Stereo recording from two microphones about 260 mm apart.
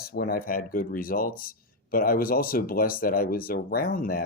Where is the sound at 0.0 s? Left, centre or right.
Left.